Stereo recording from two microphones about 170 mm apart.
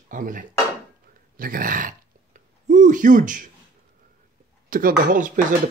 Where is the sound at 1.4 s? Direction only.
55° right (ahead or behind).